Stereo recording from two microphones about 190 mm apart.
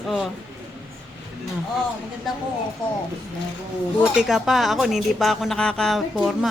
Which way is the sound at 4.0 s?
5° right (ahead or behind).